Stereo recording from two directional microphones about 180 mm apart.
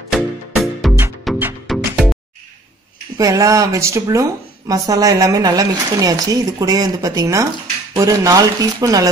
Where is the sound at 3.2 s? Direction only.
20° right (ahead or behind).